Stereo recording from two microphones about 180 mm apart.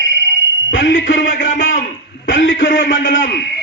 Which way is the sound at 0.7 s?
90° left.